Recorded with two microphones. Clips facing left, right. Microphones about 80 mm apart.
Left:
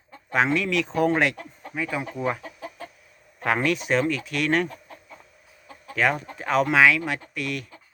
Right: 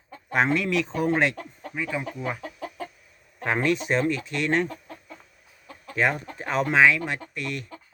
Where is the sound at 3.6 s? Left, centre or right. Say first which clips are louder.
Right 2 dB; right.